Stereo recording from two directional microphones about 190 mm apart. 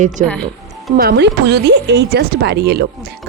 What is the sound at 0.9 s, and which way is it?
Speech, 55° right (ahead or behind).